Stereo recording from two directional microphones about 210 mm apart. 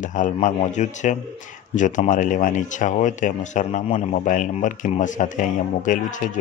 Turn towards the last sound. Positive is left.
turn(degrees=40)  # may be behind; listen again after turning